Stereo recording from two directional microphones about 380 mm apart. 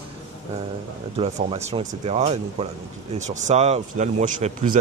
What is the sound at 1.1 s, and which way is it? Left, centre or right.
A man's voice, centre.